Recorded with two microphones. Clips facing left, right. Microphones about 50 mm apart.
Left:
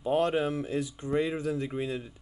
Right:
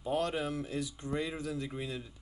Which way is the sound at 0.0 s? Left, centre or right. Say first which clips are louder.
Left 6 dB; left.